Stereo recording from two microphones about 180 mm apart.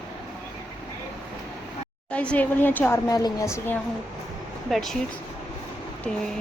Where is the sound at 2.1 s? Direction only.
5° left (ahead or behind).